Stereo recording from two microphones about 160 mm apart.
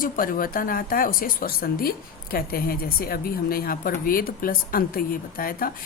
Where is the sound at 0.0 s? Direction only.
60° left (ahead or behind).